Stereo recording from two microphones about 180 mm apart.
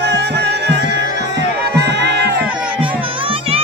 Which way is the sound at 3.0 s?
30° right (ahead or behind).